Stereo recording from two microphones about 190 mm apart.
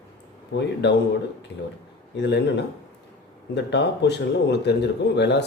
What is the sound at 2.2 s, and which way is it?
Speech, 65° left (ahead or behind).